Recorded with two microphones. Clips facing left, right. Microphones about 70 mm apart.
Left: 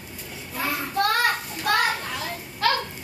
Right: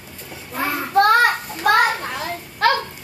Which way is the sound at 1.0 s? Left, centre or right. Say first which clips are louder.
Right 8 dB; right.